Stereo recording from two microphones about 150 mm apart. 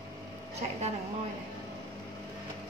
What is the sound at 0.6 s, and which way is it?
Speech, 45° right (ahead or behind).